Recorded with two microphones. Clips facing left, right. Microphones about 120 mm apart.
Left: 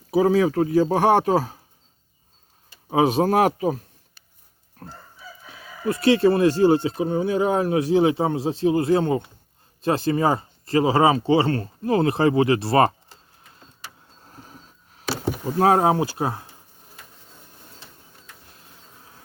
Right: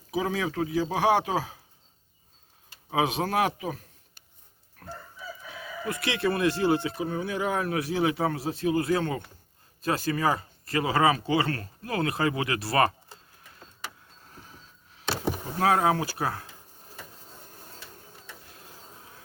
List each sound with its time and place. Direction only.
0.1 s speech: 40° left (ahead or behind)
2.9 s speech: 35° left (ahead or behind)
4.8 s chicken: 35° left (ahead or behind)
5.8 s speech: 30° left (ahead or behind)
14.3 s a sound: 40° left (ahead or behind)
15.2 s speech: 35° left (ahead or behind)